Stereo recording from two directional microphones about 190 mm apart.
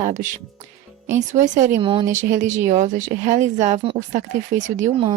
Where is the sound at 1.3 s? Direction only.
40° right (ahead or behind).